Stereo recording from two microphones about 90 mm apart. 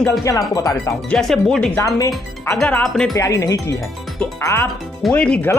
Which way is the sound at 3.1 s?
35° left (ahead or behind).